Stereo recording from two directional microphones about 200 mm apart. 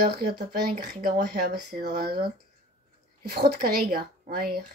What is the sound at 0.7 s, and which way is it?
A woman's voice, 45° right (ahead or behind).